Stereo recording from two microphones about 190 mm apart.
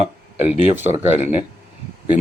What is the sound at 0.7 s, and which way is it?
Speech, 10° right (ahead or behind).